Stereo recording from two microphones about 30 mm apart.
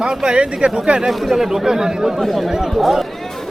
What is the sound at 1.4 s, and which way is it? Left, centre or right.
Speech, centre.